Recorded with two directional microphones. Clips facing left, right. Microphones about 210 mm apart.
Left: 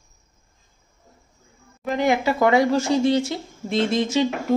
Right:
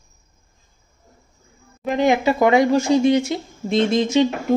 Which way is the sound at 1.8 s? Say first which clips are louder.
Right 3 dB; 20° right (ahead or behind).